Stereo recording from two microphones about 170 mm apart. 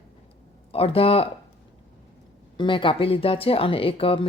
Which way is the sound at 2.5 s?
30° left (ahead or behind).